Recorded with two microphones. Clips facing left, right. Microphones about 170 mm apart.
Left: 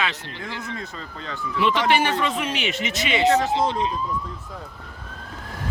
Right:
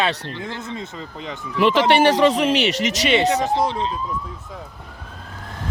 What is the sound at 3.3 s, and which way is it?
Speech, 15° right (ahead or behind).